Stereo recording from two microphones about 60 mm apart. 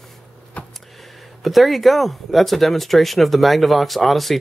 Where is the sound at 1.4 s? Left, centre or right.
Centre.